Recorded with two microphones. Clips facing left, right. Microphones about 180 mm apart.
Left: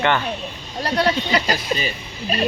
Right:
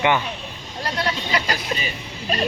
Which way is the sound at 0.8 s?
35° left (ahead or behind).